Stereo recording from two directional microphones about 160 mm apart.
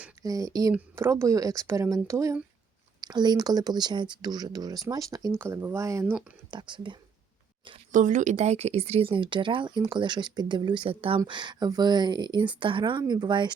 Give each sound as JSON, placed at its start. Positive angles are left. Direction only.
{"t": 0.2, "sound": "speech", "side_deg": -20}
{"t": 7.9, "sound": "speech", "side_deg": -50}